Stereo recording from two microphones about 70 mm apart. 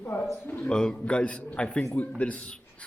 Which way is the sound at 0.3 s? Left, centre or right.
Left.